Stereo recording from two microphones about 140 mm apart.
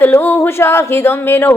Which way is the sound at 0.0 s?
15° left (ahead or behind).